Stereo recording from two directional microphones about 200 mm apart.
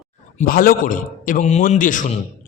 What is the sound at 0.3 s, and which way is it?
A man's voice, 45° left (ahead or behind).